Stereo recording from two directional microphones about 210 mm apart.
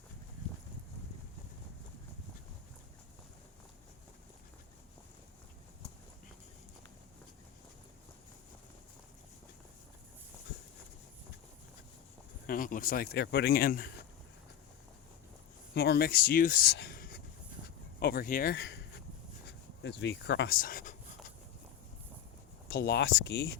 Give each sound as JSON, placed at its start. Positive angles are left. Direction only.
{"t": 12.5, "sound": "speech", "side_deg": 40}
{"t": 15.7, "sound": "speech", "side_deg": 50}
{"t": 20.6, "sound": "speech", "side_deg": 40}
{"t": 22.7, "sound": "speech", "side_deg": 50}